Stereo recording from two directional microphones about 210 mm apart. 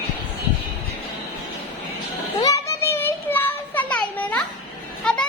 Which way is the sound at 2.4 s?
15° left (ahead or behind).